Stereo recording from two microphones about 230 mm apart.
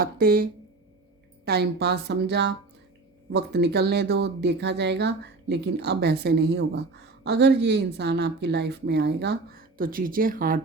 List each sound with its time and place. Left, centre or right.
0.0 s speech: right
1.5 s speech: right